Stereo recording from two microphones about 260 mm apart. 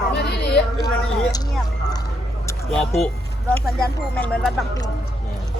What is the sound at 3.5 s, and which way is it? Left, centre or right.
Speech, centre.